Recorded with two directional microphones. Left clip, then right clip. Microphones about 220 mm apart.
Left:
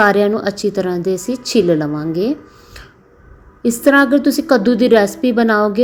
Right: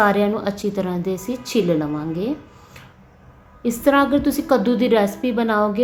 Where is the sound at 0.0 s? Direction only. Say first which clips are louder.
Left 5 dB; 30° left (ahead or behind).